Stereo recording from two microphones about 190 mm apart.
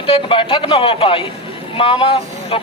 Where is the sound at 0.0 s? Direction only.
25° left (ahead or behind).